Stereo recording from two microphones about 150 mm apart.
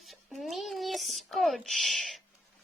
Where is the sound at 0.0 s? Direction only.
Centre (ahead or behind).